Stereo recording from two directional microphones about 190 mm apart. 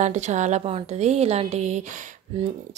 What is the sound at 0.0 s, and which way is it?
A woman's voice, 40° right (ahead or behind).